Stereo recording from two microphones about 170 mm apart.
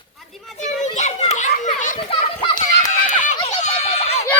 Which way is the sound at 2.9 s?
45° left (ahead or behind).